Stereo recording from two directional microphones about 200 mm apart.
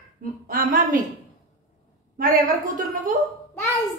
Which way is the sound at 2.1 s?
45° right (ahead or behind).